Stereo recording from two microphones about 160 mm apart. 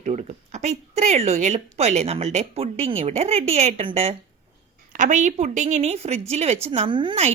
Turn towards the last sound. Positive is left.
turn(degrees=-35)  # may be behind; listen again after turning